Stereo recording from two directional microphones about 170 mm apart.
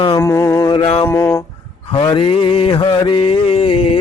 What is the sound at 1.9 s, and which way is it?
Mantra, 30° left (ahead or behind).